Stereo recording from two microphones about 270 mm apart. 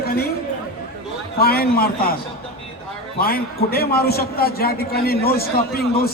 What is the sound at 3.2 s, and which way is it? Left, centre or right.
A man's voice, left.